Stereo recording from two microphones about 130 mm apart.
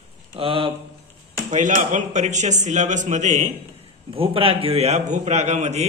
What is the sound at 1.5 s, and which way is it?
Speech, 70° right (ahead or behind).